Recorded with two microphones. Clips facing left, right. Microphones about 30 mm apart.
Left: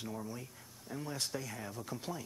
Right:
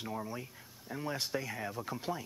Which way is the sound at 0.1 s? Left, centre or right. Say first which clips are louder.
Right 3 dB; right.